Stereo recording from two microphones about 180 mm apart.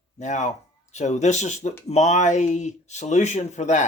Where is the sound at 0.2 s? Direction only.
40° left (ahead or behind).